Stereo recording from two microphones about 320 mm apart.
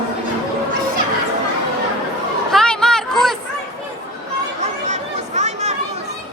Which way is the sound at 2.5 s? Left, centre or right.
Centre.